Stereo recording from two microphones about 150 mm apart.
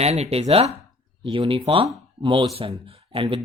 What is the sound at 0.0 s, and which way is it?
Speech, 45° right (ahead or behind).